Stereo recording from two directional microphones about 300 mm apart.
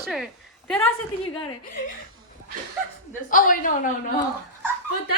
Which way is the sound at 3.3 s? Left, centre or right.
Left.